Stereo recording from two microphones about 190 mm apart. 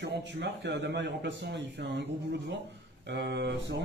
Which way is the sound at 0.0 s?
70° right (ahead or behind).